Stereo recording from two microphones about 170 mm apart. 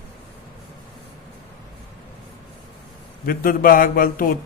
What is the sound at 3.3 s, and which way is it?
Speech, 55° left (ahead or behind).